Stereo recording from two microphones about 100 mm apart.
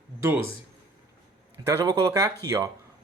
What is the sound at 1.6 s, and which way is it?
Speech, 35° right (ahead or behind).